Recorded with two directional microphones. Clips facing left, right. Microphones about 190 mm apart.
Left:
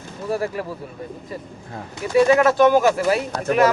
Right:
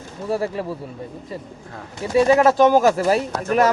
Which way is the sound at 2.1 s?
35° right (ahead or behind).